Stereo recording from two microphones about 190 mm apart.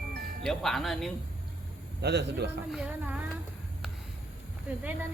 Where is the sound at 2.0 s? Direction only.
65° right (ahead or behind).